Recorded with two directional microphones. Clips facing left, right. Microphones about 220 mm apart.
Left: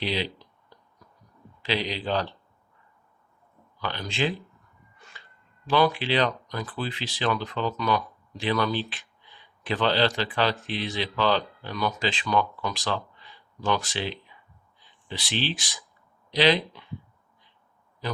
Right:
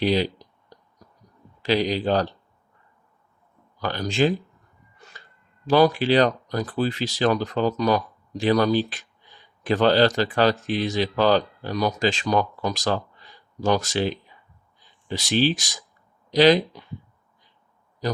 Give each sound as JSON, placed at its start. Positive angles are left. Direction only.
{"t": 0.0, "sound": "a sound", "side_deg": -45}
{"t": 1.6, "sound": "speech", "side_deg": -45}
{"t": 3.8, "sound": "speech", "side_deg": -40}
{"t": 5.6, "sound": "speech", "side_deg": -40}